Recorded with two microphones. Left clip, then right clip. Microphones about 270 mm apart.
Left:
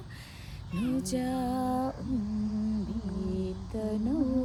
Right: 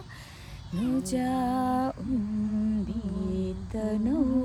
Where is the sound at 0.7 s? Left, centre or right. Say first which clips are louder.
Right 3 dB; right.